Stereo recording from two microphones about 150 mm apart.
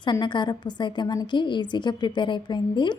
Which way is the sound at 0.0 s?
30° left (ahead or behind).